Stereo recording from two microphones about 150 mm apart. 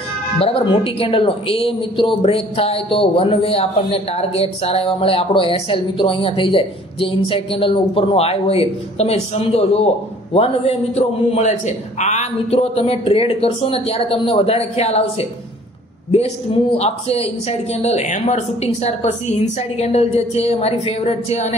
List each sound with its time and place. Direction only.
0.4 s speech: 40° left (ahead or behind)
16.7 s speech: 45° left (ahead or behind)